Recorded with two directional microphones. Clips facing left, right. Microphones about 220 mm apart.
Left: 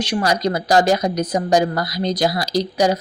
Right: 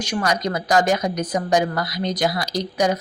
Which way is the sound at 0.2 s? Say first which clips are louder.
Left 2 dB; 35° left (ahead or behind).